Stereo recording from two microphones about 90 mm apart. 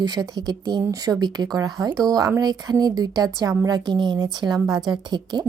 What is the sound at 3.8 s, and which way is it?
Speech, 55° right (ahead or behind).